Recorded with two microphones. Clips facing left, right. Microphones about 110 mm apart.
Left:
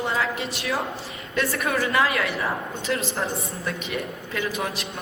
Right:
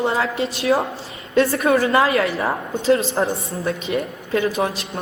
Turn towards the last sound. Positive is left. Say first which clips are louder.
# right 7 dB
turn(degrees=-30)  # may be behind; listen again after turning